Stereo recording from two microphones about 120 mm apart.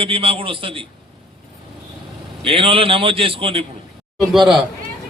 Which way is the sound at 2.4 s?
50° right (ahead or behind).